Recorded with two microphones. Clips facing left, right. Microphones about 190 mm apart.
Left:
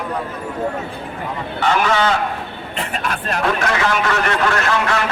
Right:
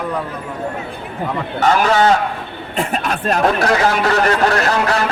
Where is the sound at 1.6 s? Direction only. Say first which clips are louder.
Right 3 dB; 40° right (ahead or behind).